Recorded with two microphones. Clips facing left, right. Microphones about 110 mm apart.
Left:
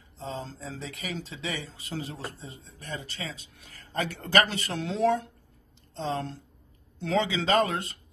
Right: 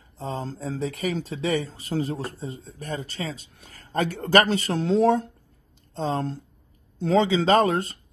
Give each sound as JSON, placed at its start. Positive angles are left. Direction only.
{"t": 0.2, "sound": "speech", "side_deg": -45}